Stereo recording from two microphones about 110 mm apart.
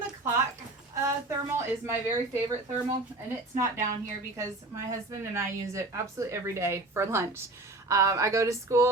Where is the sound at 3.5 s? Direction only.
25° right (ahead or behind).